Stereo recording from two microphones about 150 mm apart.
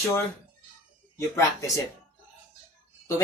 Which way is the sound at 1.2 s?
20° left (ahead or behind).